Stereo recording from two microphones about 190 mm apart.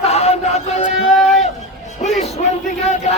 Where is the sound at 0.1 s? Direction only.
35° left (ahead or behind).